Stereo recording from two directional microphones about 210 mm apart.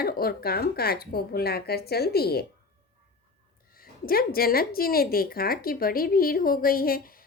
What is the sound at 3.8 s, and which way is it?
A woman's voice, 45° left (ahead or behind).